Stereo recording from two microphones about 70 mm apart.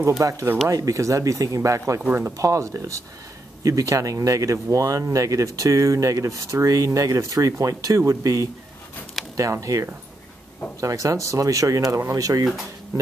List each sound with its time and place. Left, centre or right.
0.2 s speech: right
2.0 s speech: right
2.3 s speech: right